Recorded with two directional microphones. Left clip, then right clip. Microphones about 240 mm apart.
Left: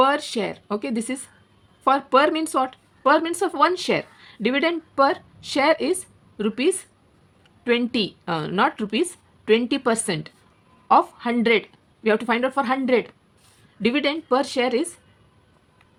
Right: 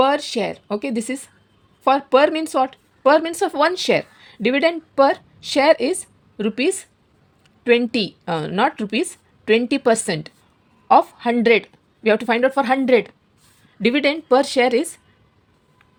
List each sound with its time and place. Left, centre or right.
0.0 s a woman's voice: centre